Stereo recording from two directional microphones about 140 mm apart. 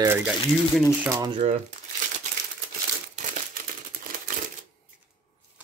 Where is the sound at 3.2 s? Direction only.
55° right (ahead or behind).